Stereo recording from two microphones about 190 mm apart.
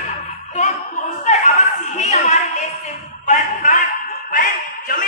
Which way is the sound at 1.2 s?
35° left (ahead or behind).